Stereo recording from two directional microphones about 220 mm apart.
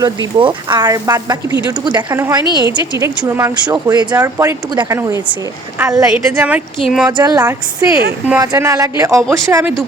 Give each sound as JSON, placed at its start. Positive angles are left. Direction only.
{"t": 0.3, "sound": "a woman's voice", "side_deg": -20}
{"t": 5.8, "sound": "a woman's voice", "side_deg": -5}
{"t": 7.2, "sound": "speech", "side_deg": -15}